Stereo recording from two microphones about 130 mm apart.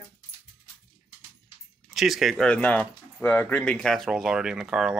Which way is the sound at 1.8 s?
Centre (ahead or behind).